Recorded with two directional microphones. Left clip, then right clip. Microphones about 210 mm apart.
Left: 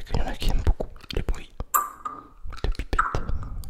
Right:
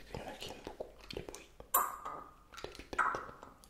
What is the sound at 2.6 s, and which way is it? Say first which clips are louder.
Music: left 9 dB; 55° left (ahead or behind).